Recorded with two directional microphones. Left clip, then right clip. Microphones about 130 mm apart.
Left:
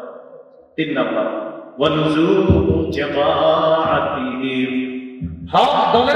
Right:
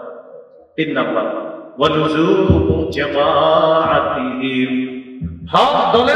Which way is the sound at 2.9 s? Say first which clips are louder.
Right 2 dB; 35° right (ahead or behind).